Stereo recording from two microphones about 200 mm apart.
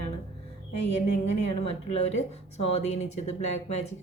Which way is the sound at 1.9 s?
35° left (ahead or behind).